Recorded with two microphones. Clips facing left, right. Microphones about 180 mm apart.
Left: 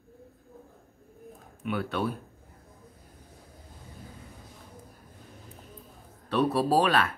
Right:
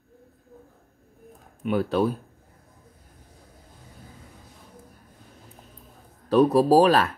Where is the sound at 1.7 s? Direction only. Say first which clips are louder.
Right 7 dB; 35° right (ahead or behind).